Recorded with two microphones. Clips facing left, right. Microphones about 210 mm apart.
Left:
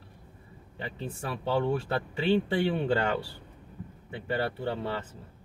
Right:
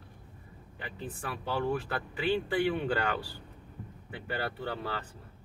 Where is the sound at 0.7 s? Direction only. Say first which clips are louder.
Left 4 dB; 25° left (ahead or behind).